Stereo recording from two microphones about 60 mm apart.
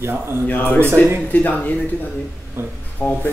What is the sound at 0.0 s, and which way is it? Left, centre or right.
Speech, right.